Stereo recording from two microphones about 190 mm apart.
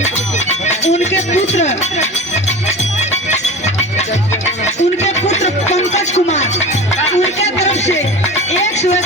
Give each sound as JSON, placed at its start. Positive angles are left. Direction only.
{"t": 0.9, "sound": "music", "side_deg": 35}
{"t": 5.0, "sound": "music", "side_deg": 35}
{"t": 8.6, "sound": "a sound", "side_deg": 35}